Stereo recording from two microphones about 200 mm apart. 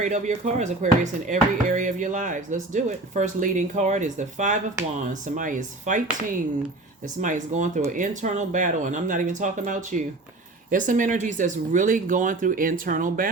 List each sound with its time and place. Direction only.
0.0 s speech: 35° right (ahead or behind)
7.2 s speech: 40° right (ahead or behind)